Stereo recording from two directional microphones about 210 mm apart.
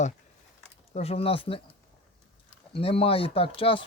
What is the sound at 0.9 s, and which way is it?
Speech, 30° left (ahead or behind).